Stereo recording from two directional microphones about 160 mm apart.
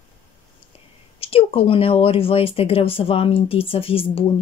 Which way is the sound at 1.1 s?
35° left (ahead or behind).